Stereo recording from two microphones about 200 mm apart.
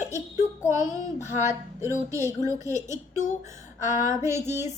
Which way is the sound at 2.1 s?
15° right (ahead or behind).